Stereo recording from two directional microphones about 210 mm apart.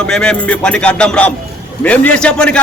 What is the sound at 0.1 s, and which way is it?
Speech, 5° left (ahead or behind).